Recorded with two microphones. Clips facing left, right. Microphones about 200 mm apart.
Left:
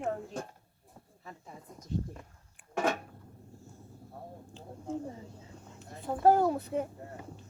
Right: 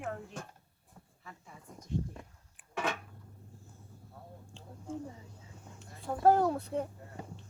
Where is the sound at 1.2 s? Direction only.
35° left (ahead or behind).